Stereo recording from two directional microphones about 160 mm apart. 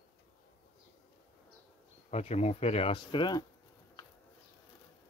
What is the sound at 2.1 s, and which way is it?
Speech, 45° left (ahead or behind).